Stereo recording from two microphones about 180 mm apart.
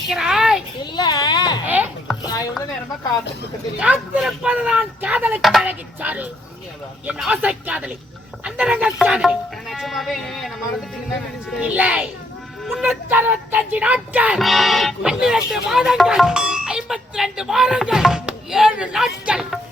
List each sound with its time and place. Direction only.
0.1 s a child's voice: 5° right (ahead or behind)
0.9 s children playing: 20° left (ahead or behind)
1.6 s chopping: 10° right (ahead or behind)
3.8 s speech: 5° right (ahead or behind)
11.6 s speech: 5° right (ahead or behind)